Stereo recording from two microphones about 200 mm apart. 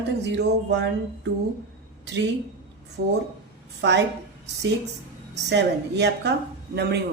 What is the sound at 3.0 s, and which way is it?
Speech, 50° right (ahead or behind).